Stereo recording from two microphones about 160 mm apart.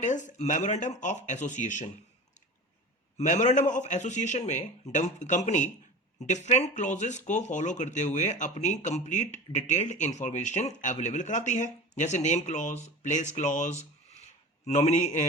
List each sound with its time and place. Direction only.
0.0 s speech: 50° left (ahead or behind)
3.2 s speech: 50° left (ahead or behind)